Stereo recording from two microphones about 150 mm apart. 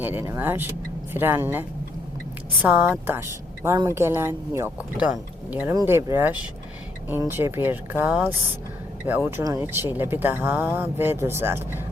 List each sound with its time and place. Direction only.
0.0 s speech: 15° right (ahead or behind)
9.4 s speech: 20° right (ahead or behind)